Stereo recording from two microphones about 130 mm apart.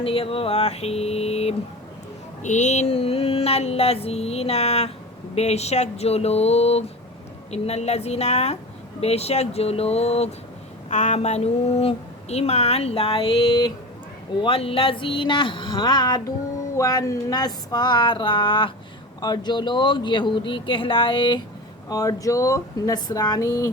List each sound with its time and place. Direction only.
0.0 s a woman's voice: 45° left (ahead or behind)
2.4 s a woman's voice: 65° left (ahead or behind); by 21.4 s 40° left (ahead or behind)
21.8 s speech: 25° left (ahead or behind)